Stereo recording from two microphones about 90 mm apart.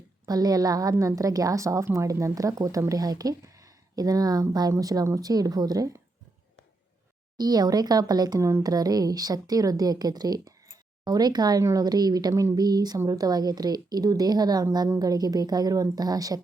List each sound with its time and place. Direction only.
0.3 s a woman's voice: 45° right (ahead or behind)
7.3 s a woman's voice: 50° right (ahead or behind)
8.4 s a woman's voice: 30° right (ahead or behind)
8.6 s a woman's voice: 45° right (ahead or behind)
12.3 s speech: 30° right (ahead or behind)
12.5 s a woman's voice: 50° right (ahead or behind)